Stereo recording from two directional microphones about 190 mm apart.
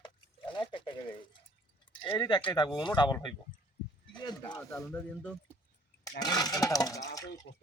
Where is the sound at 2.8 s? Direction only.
25° left (ahead or behind).